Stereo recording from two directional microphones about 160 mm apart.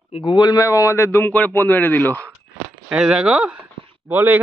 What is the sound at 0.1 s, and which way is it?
A man's voice, 30° left (ahead or behind).